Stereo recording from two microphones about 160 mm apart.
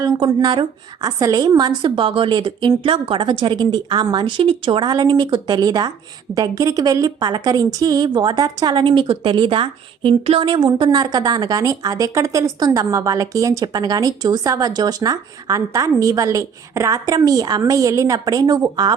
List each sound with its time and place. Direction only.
0.0 s a woman's voice: 25° right (ahead or behind)